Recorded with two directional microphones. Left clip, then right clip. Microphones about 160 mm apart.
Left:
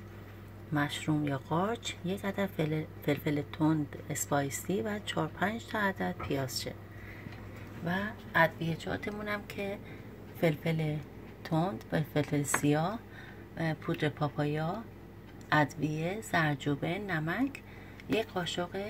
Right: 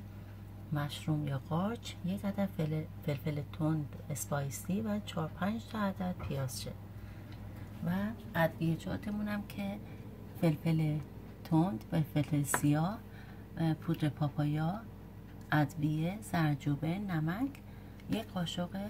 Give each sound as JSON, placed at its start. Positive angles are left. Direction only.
{"t": 0.7, "sound": "speech", "side_deg": 20}
{"t": 7.9, "sound": "speech", "side_deg": 25}
{"t": 14.2, "sound": "speech", "side_deg": 20}